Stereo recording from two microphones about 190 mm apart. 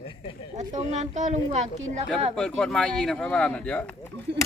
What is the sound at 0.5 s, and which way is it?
Speech, 35° right (ahead or behind).